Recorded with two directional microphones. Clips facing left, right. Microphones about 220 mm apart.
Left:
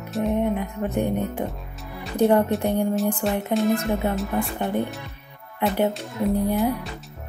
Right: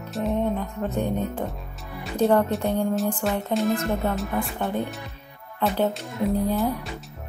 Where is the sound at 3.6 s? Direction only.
Centre (ahead or behind).